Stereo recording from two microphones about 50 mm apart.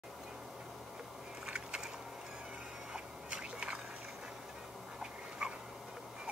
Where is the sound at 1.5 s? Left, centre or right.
Centre.